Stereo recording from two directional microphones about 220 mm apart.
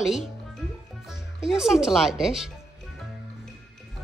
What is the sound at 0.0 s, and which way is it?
Speech, centre (ahead or behind).